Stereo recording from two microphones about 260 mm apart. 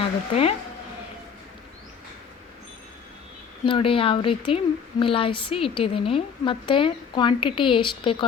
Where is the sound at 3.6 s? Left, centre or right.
Centre.